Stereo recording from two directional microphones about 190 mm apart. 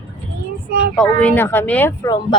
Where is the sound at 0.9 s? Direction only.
5° left (ahead or behind).